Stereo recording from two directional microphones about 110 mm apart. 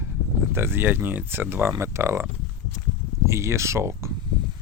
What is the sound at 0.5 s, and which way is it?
Speech, 20° right (ahead or behind).